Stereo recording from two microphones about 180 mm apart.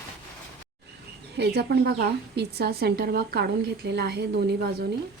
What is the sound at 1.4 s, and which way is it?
A woman's voice, 65° right (ahead or behind).